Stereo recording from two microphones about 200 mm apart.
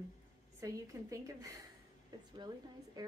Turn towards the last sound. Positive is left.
turn(degrees=-20)  # may be behind; listen again after turning